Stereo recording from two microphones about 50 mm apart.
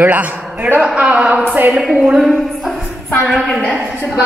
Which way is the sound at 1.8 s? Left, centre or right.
Centre.